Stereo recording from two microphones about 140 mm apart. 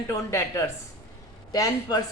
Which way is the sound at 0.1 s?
20° left (ahead or behind).